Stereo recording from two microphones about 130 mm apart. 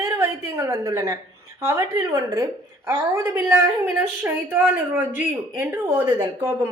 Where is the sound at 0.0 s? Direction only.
20° right (ahead or behind).